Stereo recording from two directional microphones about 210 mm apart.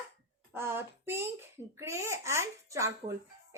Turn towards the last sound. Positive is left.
turn(degrees=-15)  # may be behind; listen again after turning